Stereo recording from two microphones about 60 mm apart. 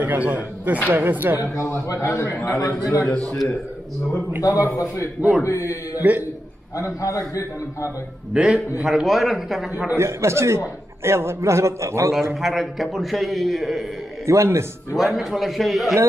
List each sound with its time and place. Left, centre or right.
0.0 s a man's voice: right
1.9 s a man's voice: left
2.6 s a man's voice: left
3.1 s a man's voice: left
4.4 s a man's voice: left
4.7 s a man's voice: left
5.9 s speech: right
6.8 s a man's voice: left
8.3 s a man's voice: centre
9.9 s a man's voice: right
12.4 s a man's voice: centre
14.2 s a man's voice: right
15.0 s a man's voice: centre